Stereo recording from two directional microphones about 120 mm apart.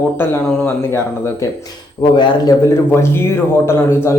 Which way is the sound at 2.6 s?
20° left (ahead or behind).